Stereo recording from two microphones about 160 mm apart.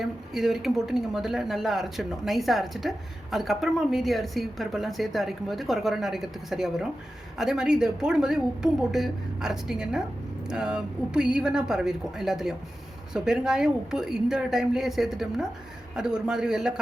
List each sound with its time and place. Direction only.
0.0 s a woman's voice: centre (ahead or behind)